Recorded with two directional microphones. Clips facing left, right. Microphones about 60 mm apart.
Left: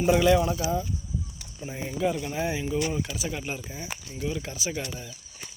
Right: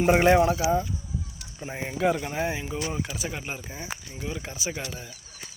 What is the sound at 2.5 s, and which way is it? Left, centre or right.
Speech, right.